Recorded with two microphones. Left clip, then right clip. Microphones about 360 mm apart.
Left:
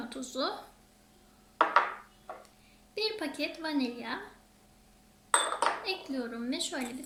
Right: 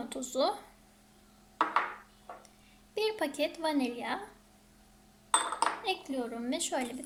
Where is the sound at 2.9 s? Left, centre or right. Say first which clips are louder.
Right 2 dB; centre.